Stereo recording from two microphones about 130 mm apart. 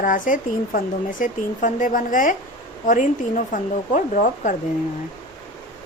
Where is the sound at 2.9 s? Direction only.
75° left (ahead or behind).